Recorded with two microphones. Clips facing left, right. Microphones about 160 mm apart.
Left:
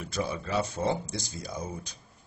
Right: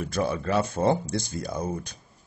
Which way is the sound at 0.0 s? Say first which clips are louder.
Right 6 dB; 55° right (ahead or behind).